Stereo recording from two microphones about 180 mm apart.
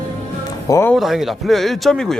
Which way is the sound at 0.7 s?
15° left (ahead or behind).